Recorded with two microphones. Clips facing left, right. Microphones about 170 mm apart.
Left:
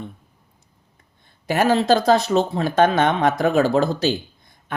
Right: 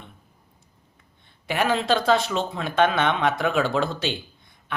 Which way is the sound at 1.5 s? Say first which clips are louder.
Left 5 dB; 40° left (ahead or behind).